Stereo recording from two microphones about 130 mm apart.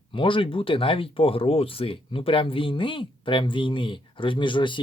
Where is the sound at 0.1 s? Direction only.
40° left (ahead or behind).